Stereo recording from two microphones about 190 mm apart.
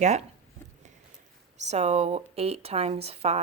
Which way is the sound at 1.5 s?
35° right (ahead or behind).